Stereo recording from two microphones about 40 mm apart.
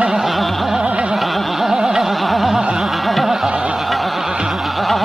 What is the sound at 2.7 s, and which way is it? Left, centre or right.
Music, centre.